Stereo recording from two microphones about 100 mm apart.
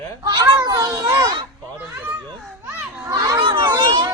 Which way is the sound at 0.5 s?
35° right (ahead or behind).